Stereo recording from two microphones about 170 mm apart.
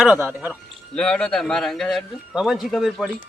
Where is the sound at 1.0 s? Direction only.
5° left (ahead or behind).